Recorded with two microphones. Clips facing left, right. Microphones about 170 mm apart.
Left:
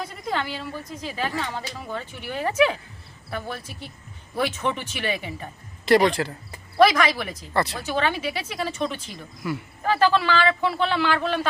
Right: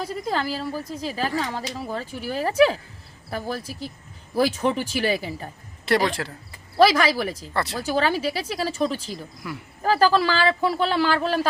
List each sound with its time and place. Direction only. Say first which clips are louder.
0.0 s a woman's voice: right 2 dB; 35° right (ahead or behind)
5.8 s speech: left 4 dB; centre (ahead or behind)
6.7 s speech: right 1 dB; 30° right (ahead or behind)
7.3 s speech: left 2 dB; centre (ahead or behind)
7.8 s speech: right 3 dB; 35° right (ahead or behind)
9.4 s speech: left 5 dB; centre (ahead or behind)
9.8 s speech: right 2 dB; 35° right (ahead or behind)